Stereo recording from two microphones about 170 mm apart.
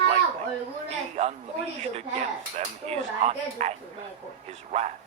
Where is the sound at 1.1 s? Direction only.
40° right (ahead or behind).